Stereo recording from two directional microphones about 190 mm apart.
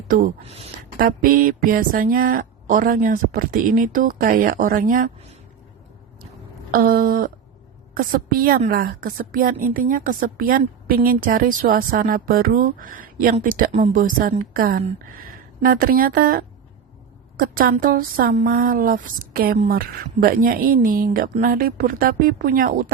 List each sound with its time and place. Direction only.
0.9 s a woman's voice: 50° right (ahead or behind)
6.7 s a woman's voice: 50° right (ahead or behind)